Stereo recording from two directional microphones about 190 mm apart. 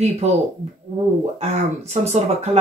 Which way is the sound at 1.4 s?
35° right (ahead or behind).